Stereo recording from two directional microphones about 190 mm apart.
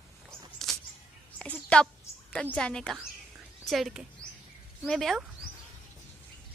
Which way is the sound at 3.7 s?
Centre (ahead or behind).